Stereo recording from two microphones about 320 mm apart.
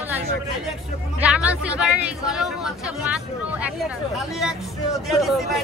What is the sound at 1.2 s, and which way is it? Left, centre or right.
Speech, centre.